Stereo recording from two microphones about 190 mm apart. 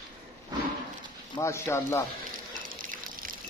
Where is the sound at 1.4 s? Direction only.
15° left (ahead or behind).